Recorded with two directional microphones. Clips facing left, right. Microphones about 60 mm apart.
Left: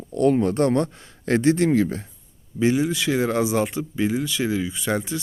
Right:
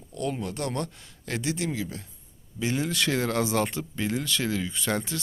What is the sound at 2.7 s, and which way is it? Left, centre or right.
Speech, centre.